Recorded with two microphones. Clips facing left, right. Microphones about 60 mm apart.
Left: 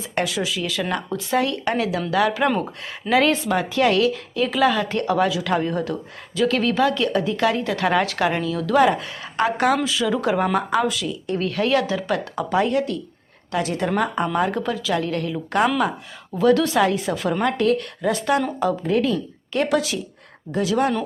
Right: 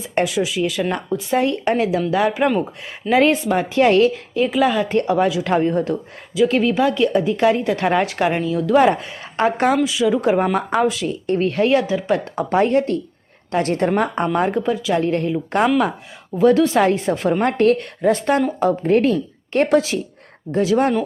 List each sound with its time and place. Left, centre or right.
0.0 s speech: right
9.8 s speech: centre
10.2 s speech: right
14.6 s a woman's voice: centre; by 20.9 s right